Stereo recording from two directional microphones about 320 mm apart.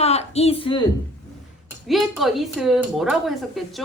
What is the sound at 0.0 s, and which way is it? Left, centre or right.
Speech, centre.